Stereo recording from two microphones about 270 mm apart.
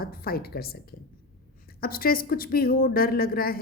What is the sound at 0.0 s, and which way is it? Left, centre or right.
Speech, left.